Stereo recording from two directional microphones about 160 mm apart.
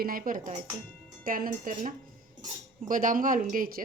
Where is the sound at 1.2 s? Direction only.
65° right (ahead or behind).